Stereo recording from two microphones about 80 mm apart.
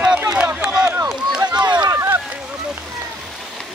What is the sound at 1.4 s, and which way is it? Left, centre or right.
Run, right.